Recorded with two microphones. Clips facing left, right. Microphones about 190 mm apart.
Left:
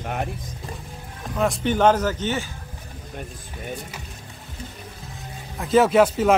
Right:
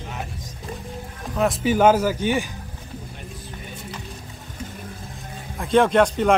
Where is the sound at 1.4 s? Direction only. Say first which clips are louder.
Right 2 dB; centre (ahead or behind).